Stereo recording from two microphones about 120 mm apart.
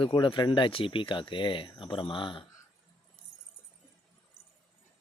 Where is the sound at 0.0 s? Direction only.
45° left (ahead or behind).